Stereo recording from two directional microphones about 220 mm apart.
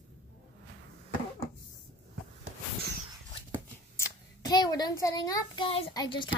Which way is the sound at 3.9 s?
15° left (ahead or behind).